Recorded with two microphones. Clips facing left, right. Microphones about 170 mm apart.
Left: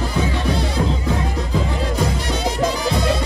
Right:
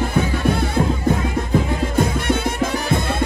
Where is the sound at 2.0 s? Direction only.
55° right (ahead or behind).